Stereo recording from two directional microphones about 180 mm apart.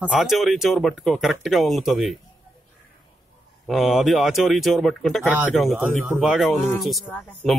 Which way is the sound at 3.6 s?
Centre (ahead or behind).